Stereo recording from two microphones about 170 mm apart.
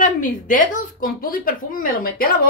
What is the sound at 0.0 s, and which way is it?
A woman's voice, 50° left (ahead or behind).